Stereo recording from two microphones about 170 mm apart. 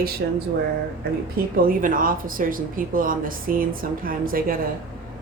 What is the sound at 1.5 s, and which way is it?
Speech, 55° right (ahead or behind).